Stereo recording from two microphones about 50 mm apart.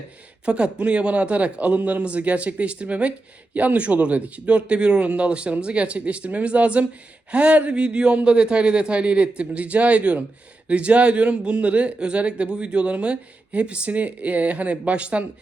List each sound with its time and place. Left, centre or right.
0.4 s a man's voice: right